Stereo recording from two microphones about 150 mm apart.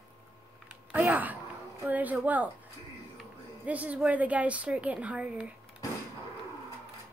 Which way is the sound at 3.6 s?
10° right (ahead or behind).